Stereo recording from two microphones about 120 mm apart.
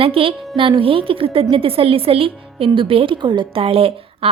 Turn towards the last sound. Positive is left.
turn(degrees=-50)  # may be behind; listen again after turning